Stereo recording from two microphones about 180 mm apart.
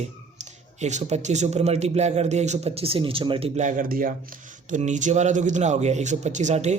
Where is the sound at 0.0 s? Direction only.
40° right (ahead or behind).